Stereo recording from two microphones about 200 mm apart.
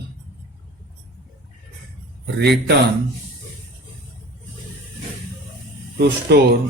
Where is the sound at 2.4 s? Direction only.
55° right (ahead or behind).